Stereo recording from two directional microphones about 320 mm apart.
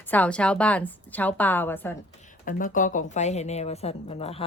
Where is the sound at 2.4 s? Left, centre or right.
Left.